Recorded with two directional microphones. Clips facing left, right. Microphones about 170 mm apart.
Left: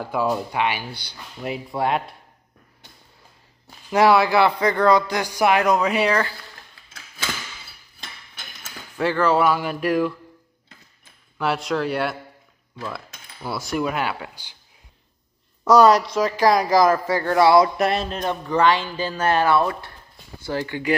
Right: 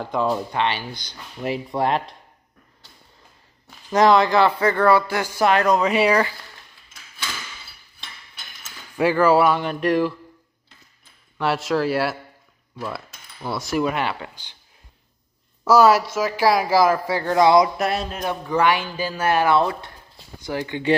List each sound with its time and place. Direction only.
0.0 s speech: 10° left (ahead or behind)
3.9 s speech: 10° left (ahead or behind)
5.8 s speech: centre (ahead or behind)
6.0 s speech: 10° right (ahead or behind)
8.9 s speech: 10° right (ahead or behind)
9.5 s speech: 5° left (ahead or behind)
11.3 s speech: centre (ahead or behind)
13.5 s speech: centre (ahead or behind)
15.6 s speech: 5° right (ahead or behind)
17.7 s speech: centre (ahead or behind); by 20.9 s 20° right (ahead or behind)